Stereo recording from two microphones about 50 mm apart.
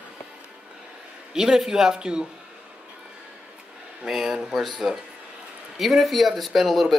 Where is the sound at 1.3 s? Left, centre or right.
Centre.